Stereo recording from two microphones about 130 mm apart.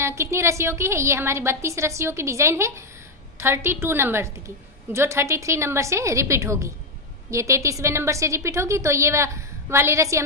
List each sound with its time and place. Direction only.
0.0 s a woman's voice: 20° right (ahead or behind)